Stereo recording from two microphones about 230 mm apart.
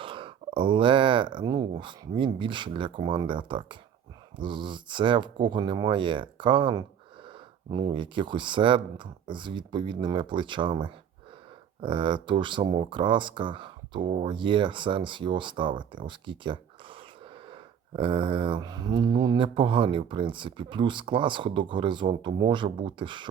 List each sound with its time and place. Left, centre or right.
0.0 s speech: right